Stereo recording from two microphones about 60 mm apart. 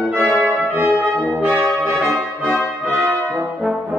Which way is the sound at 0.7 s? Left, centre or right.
Right.